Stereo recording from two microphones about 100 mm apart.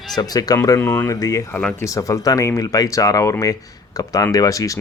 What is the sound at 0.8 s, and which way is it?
Speech, 20° left (ahead or behind).